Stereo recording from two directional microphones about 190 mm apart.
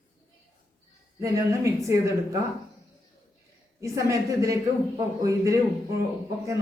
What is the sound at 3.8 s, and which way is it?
A man's voice, 15° right (ahead or behind).